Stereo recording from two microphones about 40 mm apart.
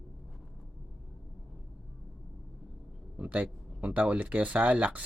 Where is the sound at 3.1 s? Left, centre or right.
Right.